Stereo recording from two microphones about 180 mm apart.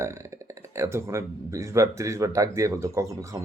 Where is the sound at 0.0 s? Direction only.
15° right (ahead or behind).